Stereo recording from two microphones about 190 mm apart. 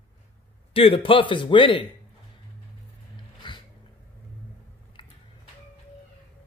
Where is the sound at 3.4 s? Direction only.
25° left (ahead or behind).